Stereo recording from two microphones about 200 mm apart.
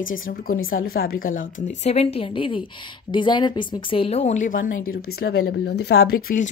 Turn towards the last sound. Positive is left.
turn(degrees=40)  # may be behind; listen again after turning